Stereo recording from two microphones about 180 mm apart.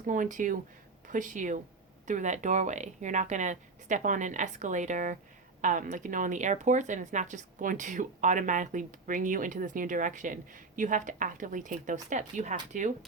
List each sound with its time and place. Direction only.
0.0 s speech: 45° right (ahead or behind)